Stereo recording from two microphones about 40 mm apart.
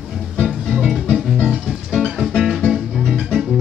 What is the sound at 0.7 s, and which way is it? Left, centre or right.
Music, centre.